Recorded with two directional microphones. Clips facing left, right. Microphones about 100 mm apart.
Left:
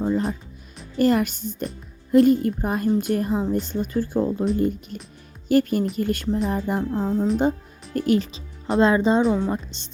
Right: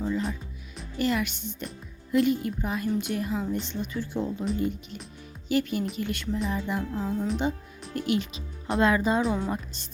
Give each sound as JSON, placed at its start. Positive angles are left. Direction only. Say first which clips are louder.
{"t": 0.0, "sound": "music", "louder": "left 6 dB", "side_deg": 40}
{"t": 0.9, "sound": "speech", "louder": "left 8 dB", "side_deg": 45}
{"t": 6.5, "sound": "music", "louder": "left 6 dB", "side_deg": 45}
{"t": 8.8, "sound": "speech", "louder": "left 5 dB", "side_deg": 30}